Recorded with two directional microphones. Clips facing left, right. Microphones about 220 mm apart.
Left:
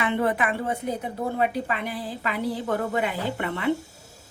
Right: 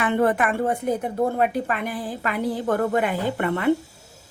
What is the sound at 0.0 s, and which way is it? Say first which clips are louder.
A woman's voice: right 4 dB; 50° right (ahead or behind).